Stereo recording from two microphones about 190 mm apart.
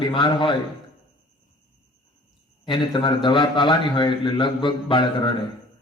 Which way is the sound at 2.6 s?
25° left (ahead or behind).